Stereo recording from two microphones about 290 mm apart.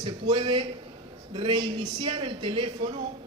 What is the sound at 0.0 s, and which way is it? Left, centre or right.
A man's voice, centre.